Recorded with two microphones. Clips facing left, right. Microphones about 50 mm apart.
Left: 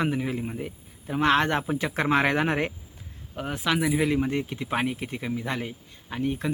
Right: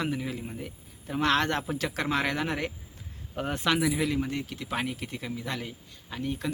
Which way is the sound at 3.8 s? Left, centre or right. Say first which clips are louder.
Left 3 dB; centre.